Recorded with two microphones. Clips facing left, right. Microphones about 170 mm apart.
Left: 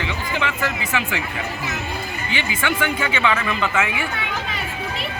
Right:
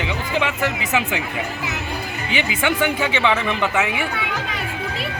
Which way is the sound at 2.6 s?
15° right (ahead or behind).